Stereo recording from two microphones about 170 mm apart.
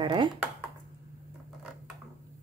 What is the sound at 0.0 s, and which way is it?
Speech, 30° right (ahead or behind).